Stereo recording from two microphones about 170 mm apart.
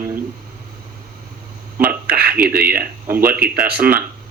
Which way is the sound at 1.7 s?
10° right (ahead or behind).